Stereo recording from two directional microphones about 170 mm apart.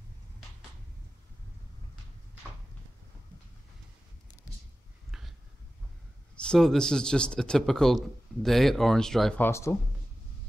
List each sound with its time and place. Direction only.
6.3 s speech: 5° left (ahead or behind)
9.5 s speech: 15° left (ahead or behind)